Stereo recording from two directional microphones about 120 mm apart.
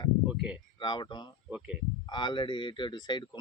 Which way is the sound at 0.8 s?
40° left (ahead or behind).